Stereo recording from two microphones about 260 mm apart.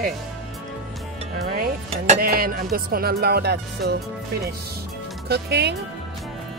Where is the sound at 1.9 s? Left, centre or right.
Right.